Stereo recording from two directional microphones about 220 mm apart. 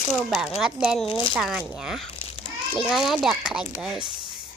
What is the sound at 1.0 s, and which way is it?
Speech, 25° left (ahead or behind).